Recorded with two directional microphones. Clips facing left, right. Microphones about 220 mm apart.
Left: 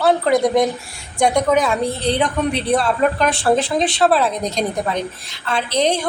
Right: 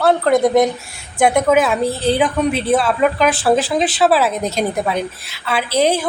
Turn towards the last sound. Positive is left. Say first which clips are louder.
# right 2 dB
turn(degrees=-5)  # may be behind; listen again after turning